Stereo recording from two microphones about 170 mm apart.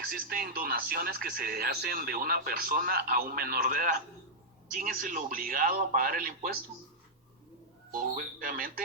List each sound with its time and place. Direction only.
0.1 s speech: 60° right (ahead or behind)
7.9 s speech: 55° right (ahead or behind)